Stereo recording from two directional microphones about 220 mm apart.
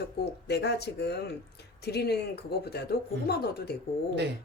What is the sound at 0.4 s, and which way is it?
Speech, 50° left (ahead or behind).